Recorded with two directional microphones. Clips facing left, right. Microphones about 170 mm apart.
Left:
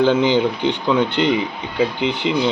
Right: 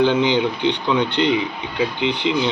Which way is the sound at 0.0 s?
45° left (ahead or behind).